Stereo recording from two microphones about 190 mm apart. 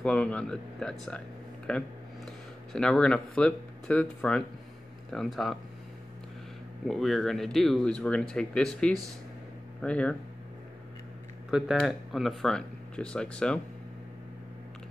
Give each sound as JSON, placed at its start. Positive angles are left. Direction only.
{"t": 0.0, "sound": "speech", "side_deg": 5}
{"t": 6.9, "sound": "speech", "side_deg": 0}
{"t": 11.5, "sound": "speech", "side_deg": 0}